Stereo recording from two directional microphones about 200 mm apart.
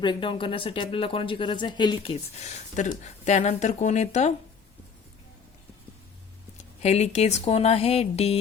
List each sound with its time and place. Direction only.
0.0 s speech: 25° left (ahead or behind)
6.6 s speech: 35° left (ahead or behind)